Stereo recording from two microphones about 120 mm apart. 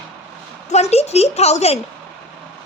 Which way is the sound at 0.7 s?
60° left (ahead or behind).